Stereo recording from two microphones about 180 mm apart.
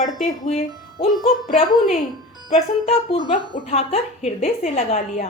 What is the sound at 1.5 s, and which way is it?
Speech, 40° left (ahead or behind).